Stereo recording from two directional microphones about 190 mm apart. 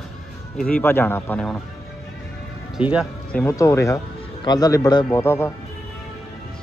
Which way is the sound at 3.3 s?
10° left (ahead or behind).